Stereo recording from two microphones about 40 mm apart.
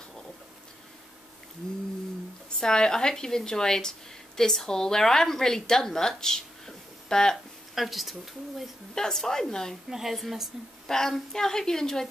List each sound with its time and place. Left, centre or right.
2.5 s a woman's voice: centre
7.7 s speech: centre
8.9 s a woman's voice: centre
9.8 s speech: centre
10.9 s a woman's voice: centre